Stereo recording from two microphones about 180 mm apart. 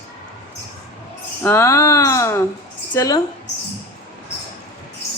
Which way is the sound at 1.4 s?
15° left (ahead or behind).